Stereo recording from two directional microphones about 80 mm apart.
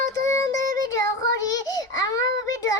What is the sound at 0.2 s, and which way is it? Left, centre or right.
Child singing, left.